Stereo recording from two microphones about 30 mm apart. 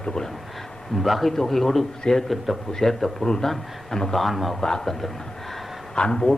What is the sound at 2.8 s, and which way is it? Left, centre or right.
Speech, centre.